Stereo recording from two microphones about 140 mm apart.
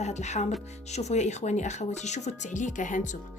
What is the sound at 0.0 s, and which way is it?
Music, 55° left (ahead or behind).